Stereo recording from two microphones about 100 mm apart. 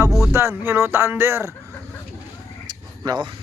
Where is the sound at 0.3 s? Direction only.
25° right (ahead or behind).